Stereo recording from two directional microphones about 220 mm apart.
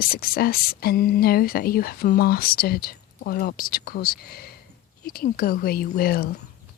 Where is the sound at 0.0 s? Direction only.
40° left (ahead or behind).